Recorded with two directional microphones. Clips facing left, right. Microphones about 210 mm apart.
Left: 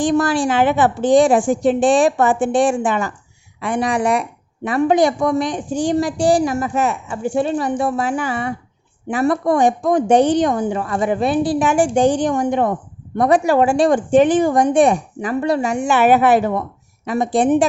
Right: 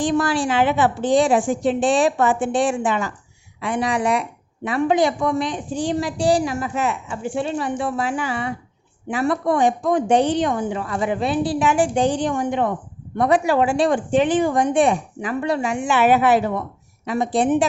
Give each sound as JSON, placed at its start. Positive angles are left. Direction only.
{"t": 0.0, "sound": "a woman's voice", "side_deg": 45}